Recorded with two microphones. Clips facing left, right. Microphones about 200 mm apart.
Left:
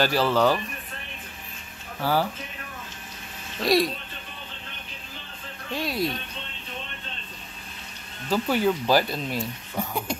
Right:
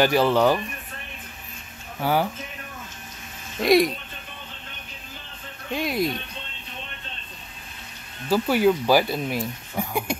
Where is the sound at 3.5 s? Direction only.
15° right (ahead or behind).